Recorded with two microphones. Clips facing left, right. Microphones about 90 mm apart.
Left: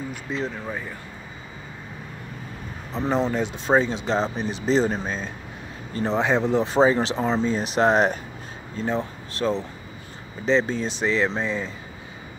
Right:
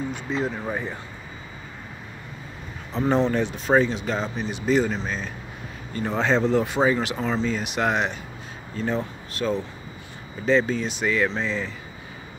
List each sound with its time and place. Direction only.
0.1 s speech: centre (ahead or behind)
0.7 s speech: 20° right (ahead or behind)
2.9 s speech: 10° left (ahead or behind)
3.3 s speech: 20° left (ahead or behind)
5.9 s speech: 20° left (ahead or behind)
6.7 s speech: 30° left (ahead or behind)
8.7 s speech: 20° left (ahead or behind)
10.7 s speech: 30° left (ahead or behind)